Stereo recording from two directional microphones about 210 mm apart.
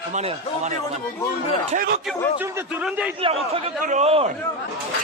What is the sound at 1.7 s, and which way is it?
Speech, 45° right (ahead or behind).